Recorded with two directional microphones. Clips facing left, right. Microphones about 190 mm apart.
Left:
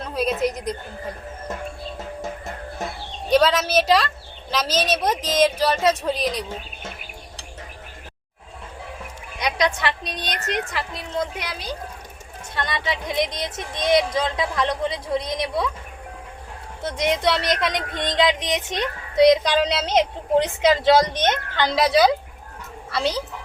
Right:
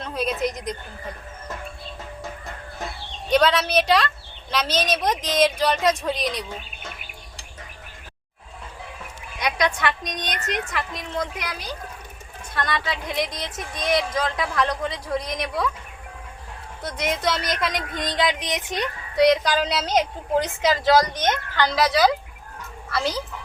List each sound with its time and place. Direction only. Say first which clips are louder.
0.0 s a sound: left 3 dB; 5° left (ahead or behind)
3.3 s speech: left 1 dB; 5° left (ahead or behind)
9.6 s speech: left 1 dB; 30° left (ahead or behind)
16.8 s speech: left 3 dB; 25° left (ahead or behind)